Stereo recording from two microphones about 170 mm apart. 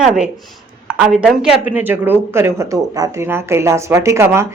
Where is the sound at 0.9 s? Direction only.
5° right (ahead or behind).